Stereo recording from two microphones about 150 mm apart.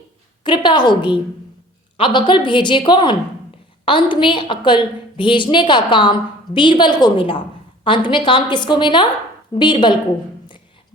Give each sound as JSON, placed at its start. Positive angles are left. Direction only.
{"t": 0.4, "sound": "a woman's voice", "side_deg": 30}